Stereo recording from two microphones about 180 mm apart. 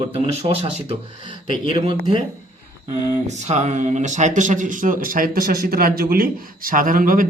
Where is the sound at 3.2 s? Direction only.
40° right (ahead or behind).